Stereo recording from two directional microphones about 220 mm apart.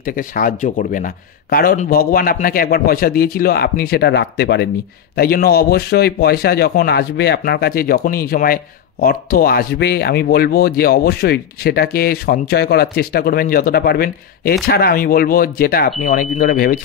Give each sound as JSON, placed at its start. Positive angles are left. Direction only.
{"t": 0.0, "sound": "speech", "side_deg": 40}